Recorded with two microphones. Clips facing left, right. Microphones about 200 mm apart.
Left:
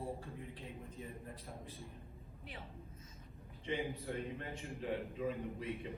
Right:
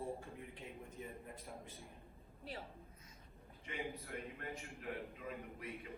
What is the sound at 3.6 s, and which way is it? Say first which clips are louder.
A man's voice: left 6 dB; 30° left (ahead or behind).